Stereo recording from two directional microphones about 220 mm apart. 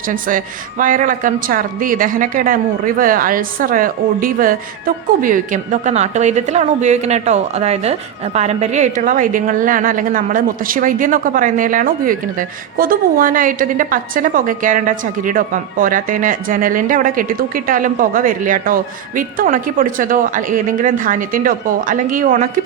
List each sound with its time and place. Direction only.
0.1 s a woman's voice: 35° right (ahead or behind)